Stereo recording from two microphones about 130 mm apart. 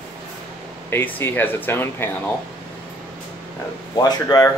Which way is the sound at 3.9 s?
30° left (ahead or behind).